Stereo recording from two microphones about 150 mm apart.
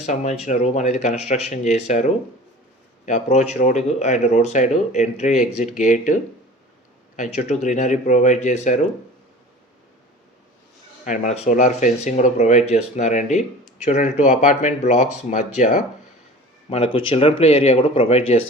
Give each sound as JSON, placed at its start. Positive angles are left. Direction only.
{"t": 0.0, "sound": "speech", "side_deg": 50}
{"t": 7.2, "sound": "speech", "side_deg": 50}
{"t": 11.0, "sound": "speech", "side_deg": 55}
{"t": 16.6, "sound": "speech", "side_deg": 40}